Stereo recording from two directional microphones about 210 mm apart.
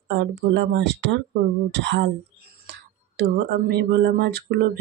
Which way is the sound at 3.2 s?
55° right (ahead or behind).